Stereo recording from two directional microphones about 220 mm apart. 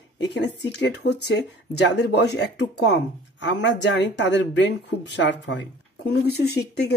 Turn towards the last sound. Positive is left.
turn(degrees=50)  # may be behind; listen again after turning